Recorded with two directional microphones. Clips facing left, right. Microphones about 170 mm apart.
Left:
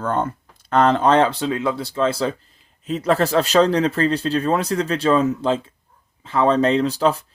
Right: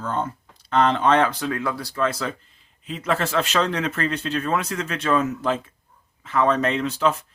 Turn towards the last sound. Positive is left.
turn(degrees=35)  # may be behind; listen again after turning